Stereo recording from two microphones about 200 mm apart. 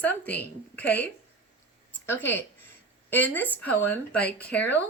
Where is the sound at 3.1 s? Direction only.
10° left (ahead or behind).